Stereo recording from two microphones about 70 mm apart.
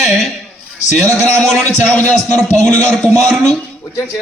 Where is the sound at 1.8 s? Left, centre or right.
Centre.